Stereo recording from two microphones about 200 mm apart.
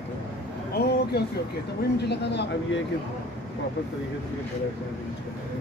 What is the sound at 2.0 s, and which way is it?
Speech, 55° left (ahead or behind).